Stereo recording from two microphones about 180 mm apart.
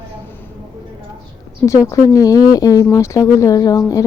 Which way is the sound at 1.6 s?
15° left (ahead or behind).